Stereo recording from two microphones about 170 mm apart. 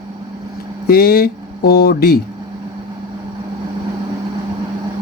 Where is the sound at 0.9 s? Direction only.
65° left (ahead or behind).